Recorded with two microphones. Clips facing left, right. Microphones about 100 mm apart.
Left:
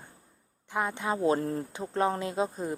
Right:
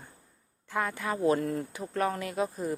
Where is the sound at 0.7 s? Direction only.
20° left (ahead or behind).